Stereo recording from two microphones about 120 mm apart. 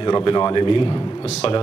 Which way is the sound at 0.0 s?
45° left (ahead or behind).